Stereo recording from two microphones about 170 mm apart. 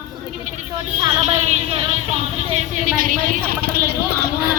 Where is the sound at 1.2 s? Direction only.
40° right (ahead or behind).